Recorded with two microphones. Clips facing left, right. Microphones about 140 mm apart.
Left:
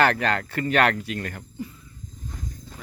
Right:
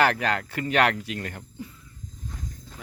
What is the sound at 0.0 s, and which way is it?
Speech, 10° right (ahead or behind).